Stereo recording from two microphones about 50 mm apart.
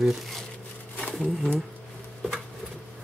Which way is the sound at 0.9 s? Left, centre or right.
Centre.